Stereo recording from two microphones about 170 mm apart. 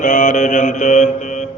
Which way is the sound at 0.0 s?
50° left (ahead or behind).